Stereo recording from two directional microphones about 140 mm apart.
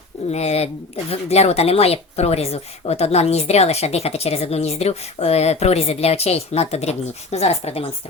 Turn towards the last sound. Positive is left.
turn(degrees=45)  # may be behind; listen again after turning